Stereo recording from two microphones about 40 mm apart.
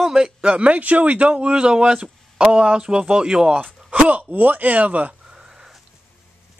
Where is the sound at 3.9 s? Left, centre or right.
Right.